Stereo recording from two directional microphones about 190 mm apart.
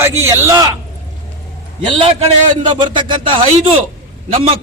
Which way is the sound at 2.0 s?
30° right (ahead or behind).